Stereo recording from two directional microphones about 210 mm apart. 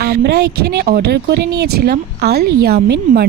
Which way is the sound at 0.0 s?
50° right (ahead or behind).